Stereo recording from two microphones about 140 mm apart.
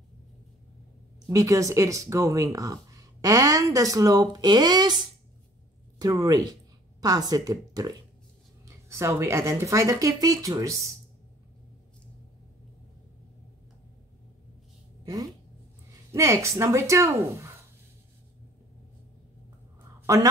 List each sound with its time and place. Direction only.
1.2 s speech: 25° right (ahead or behind)
16.1 s speech: 20° right (ahead or behind)
20.1 s a woman's voice: 25° right (ahead or behind)